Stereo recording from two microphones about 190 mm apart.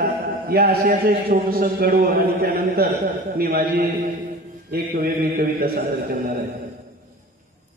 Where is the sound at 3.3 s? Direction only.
50° right (ahead or behind).